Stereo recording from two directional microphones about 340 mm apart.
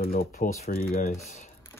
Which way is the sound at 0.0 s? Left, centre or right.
Left.